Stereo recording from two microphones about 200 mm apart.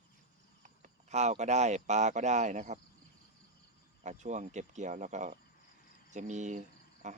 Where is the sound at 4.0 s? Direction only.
35° right (ahead or behind).